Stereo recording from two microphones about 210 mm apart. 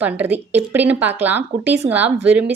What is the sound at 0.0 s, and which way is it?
A woman's voice, 10° right (ahead or behind).